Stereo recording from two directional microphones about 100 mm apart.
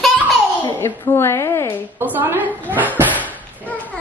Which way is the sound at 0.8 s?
25° left (ahead or behind).